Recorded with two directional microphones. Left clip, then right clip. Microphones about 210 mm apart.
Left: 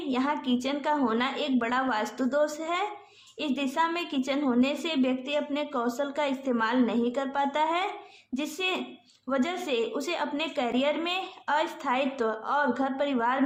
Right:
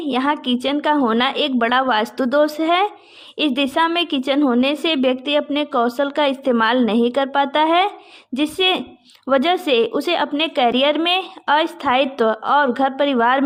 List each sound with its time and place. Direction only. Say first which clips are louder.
0.1 s a woman's voice: right 9 dB; 35° right (ahead or behind)